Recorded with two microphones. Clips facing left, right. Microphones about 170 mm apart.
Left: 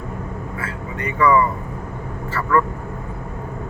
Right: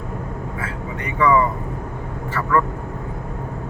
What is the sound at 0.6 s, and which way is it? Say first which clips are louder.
Speech: left 3 dB; 20° right (ahead or behind).